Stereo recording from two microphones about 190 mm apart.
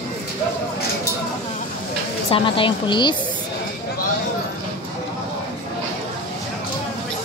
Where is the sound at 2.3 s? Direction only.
25° left (ahead or behind).